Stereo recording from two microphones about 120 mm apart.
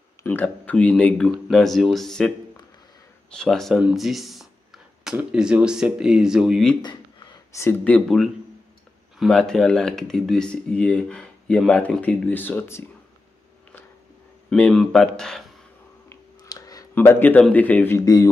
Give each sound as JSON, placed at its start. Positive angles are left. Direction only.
{"t": 0.2, "sound": "speech", "side_deg": 15}
{"t": 6.8, "sound": "a sound", "side_deg": 40}
{"t": 7.8, "sound": "speech", "side_deg": 5}
{"t": 14.5, "sound": "speech", "side_deg": 5}
{"t": 16.4, "sound": "a sound", "side_deg": 30}
{"t": 16.9, "sound": "speech", "side_deg": 20}
{"t": 18.0, "sound": "speech", "side_deg": 30}